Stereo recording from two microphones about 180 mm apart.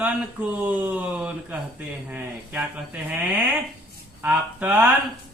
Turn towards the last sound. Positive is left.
turn(degrees=-10)  # may be behind; listen again after turning